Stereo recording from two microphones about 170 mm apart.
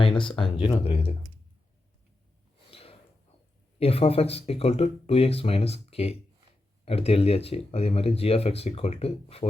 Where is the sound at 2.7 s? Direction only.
35° left (ahead or behind).